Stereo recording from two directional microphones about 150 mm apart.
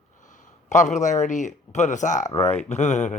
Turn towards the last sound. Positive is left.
turn(degrees=50)  # may be behind; listen again after turning